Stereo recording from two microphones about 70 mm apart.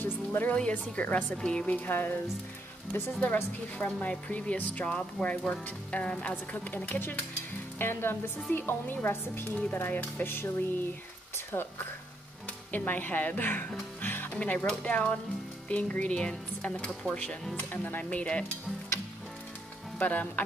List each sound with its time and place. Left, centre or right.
0.0 s music: left
0.6 s a woman's voice: centre
1.9 s speech: left
14.0 s music: left
14.4 s a woman's voice: left
17.6 s speech: left
20.0 s speech: left